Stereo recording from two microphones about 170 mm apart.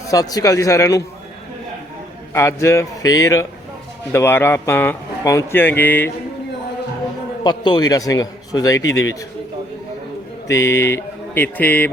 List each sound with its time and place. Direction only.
0.1 s a man's voice: 20° left (ahead or behind)
2.3 s a man's voice: 15° left (ahead or behind)
7.4 s a man's voice: 25° left (ahead or behind)
10.5 s a man's voice: 15° left (ahead or behind)